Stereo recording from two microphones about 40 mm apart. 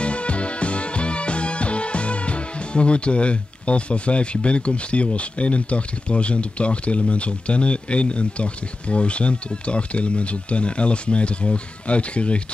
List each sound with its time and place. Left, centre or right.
0.0 s music: left